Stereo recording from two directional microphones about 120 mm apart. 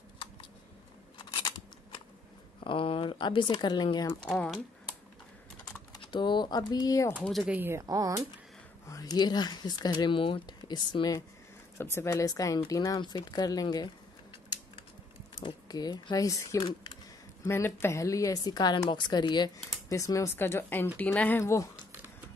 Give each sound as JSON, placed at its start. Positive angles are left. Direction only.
{"t": 1.1, "sound": "scissors", "side_deg": 40}
{"t": 2.6, "sound": "speech", "side_deg": 45}
{"t": 4.2, "sound": "speech", "side_deg": 10}
{"t": 5.9, "sound": "speech", "side_deg": 40}
{"t": 7.1, "sound": "speech", "side_deg": 10}
{"t": 7.4, "sound": "speech", "side_deg": -15}
{"t": 7.8, "sound": "speech", "side_deg": -30}
{"t": 8.8, "sound": "speech", "side_deg": 30}
{"t": 11.8, "sound": "speech", "side_deg": 20}
{"t": 15.4, "sound": "speech", "side_deg": 35}
{"t": 19.9, "sound": "speech", "side_deg": 25}